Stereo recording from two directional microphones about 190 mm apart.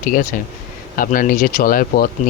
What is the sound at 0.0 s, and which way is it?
Speech, 45° left (ahead or behind).